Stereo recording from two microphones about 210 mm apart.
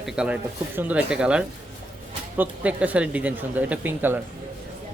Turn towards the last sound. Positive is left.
turn(degrees=-10)  # may be behind; listen again after turning